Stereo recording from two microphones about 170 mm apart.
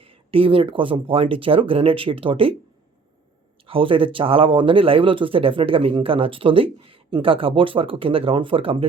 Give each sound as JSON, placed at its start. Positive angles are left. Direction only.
{"t": 0.0, "sound": "speech", "side_deg": -35}
{"t": 3.7, "sound": "speech", "side_deg": -30}